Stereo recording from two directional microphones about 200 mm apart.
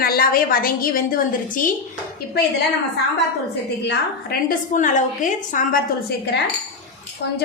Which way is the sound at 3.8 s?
55° left (ahead or behind).